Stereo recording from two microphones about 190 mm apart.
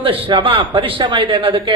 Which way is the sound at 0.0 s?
30° right (ahead or behind).